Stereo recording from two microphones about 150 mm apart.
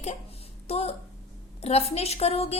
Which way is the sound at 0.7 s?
45° left (ahead or behind).